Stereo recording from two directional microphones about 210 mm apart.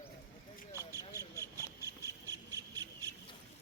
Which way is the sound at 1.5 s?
15° right (ahead or behind).